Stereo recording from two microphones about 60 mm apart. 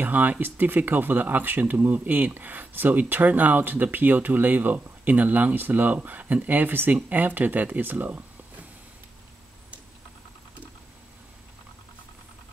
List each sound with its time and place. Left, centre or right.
0.0 s speech: right